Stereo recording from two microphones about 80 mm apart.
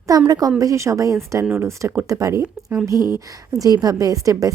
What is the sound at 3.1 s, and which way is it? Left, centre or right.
A woman's voice, right.